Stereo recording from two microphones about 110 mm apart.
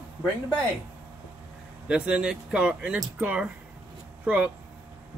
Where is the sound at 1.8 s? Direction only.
10° right (ahead or behind).